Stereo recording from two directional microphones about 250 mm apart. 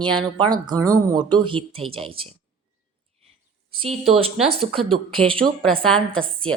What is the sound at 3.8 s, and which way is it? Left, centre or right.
Speech, right.